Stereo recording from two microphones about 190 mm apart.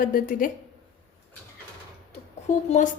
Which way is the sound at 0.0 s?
45° left (ahead or behind).